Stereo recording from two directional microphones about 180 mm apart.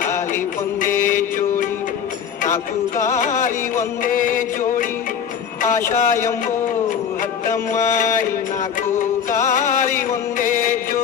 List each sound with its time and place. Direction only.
0.8 s music: 50° left (ahead or behind)
3.2 s music: 45° left (ahead or behind)
5.9 s speech: 45° left (ahead or behind)
9.5 s music: 45° left (ahead or behind)